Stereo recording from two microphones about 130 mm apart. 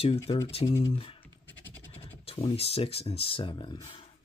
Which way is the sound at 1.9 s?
50° left (ahead or behind).